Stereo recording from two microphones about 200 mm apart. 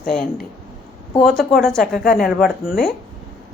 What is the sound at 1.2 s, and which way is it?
A woman's voice, centre (ahead or behind).